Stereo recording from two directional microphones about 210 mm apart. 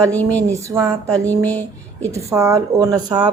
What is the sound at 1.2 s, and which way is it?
Speech, 10° left (ahead or behind).